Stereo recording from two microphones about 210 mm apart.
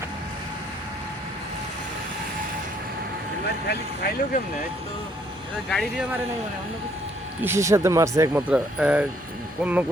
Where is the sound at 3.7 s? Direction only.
45° left (ahead or behind).